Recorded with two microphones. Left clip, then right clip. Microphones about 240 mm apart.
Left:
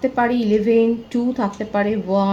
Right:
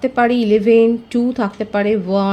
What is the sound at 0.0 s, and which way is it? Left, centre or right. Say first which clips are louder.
Speech: right 3 dB; right.